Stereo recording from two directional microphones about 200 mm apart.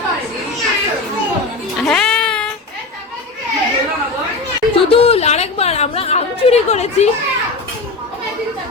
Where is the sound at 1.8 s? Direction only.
5° left (ahead or behind).